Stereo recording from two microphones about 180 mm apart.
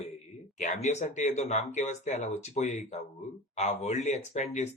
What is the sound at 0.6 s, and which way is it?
Speech, 40° left (ahead or behind).